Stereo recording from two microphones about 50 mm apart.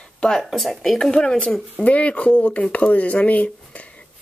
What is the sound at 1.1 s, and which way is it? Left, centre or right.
Speech, centre.